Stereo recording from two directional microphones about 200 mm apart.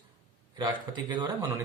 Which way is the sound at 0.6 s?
20° right (ahead or behind).